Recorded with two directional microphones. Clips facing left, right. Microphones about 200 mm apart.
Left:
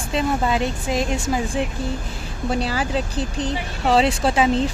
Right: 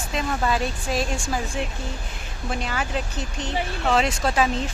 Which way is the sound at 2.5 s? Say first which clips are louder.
Left 5 dB; 35° left (ahead or behind).